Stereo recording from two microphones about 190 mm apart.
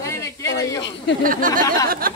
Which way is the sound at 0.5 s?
75° left (ahead or behind).